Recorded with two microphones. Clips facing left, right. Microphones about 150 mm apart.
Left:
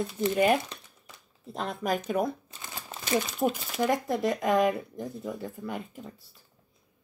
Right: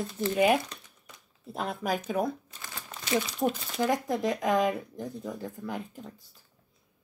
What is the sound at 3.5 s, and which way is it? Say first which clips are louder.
Speech: left 1 dB; 5° left (ahead or behind).